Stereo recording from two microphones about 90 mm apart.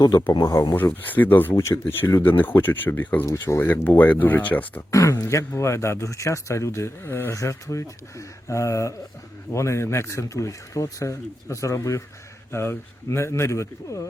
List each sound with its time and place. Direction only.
0.3 s speech: 50° left (ahead or behind)
0.7 s speech: 25° left (ahead or behind)
1.5 s speech: 35° left (ahead or behind); by 4.8 s 20° left (ahead or behind)
4.9 s speech: 35° left (ahead or behind)